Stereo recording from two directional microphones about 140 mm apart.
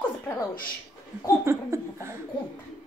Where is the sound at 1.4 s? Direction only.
20° right (ahead or behind).